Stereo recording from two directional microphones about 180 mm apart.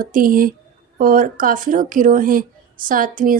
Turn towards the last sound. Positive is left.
turn(degrees=-50)  # may be behind; listen again after turning